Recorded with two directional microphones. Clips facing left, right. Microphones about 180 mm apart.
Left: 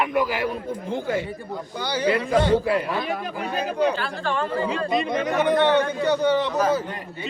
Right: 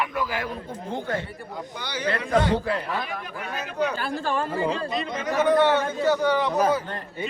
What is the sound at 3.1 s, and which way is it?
Speech, 35° left (ahead or behind).